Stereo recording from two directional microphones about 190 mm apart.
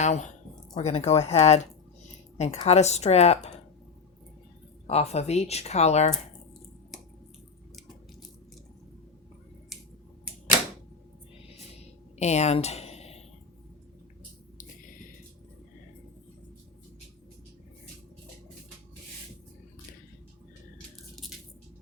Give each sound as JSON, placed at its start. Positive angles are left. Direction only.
{"t": 0.0, "sound": "speech", "side_deg": 40}
{"t": 4.9, "sound": "speech", "side_deg": 35}
{"t": 12.2, "sound": "a sound", "side_deg": 35}
{"t": 21.2, "sound": "squish", "side_deg": 0}